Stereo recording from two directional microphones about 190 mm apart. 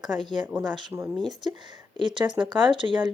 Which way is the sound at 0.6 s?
20° right (ahead or behind).